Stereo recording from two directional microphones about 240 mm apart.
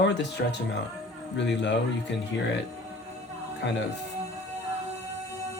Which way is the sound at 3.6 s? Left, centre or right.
Left.